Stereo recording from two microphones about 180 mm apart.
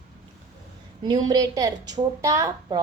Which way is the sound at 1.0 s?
20° right (ahead or behind).